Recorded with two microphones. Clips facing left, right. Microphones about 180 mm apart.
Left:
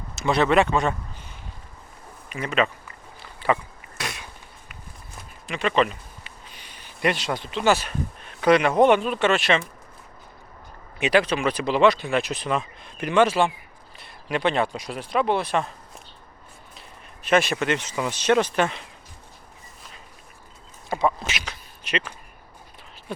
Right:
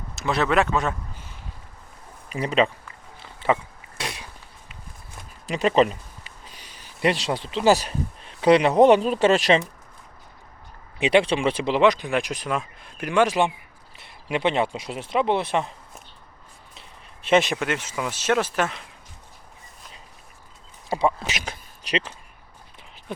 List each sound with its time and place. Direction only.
0.2 s speech: centre (ahead or behind)
2.3 s speech: 35° right (ahead or behind)
3.2 s a sound: 20° right (ahead or behind)
5.5 s speech: 35° right (ahead or behind)
11.0 s speech: 25° right (ahead or behind)
17.2 s speech: 20° right (ahead or behind)
17.6 s speech: 5° right (ahead or behind)
20.9 s speech: 35° right (ahead or behind)